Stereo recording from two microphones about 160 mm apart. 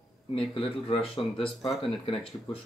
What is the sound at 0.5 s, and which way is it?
Speech, 35° left (ahead or behind).